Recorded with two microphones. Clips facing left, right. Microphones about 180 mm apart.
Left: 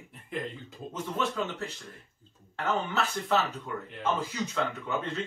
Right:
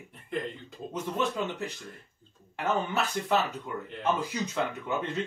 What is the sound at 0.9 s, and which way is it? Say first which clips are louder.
Speech: right 2 dB; 15° right (ahead or behind).